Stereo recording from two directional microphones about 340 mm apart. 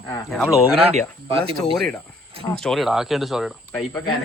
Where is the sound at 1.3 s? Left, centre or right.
Centre.